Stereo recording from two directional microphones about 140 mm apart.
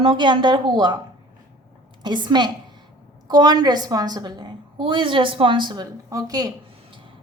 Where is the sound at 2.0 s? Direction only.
30° right (ahead or behind).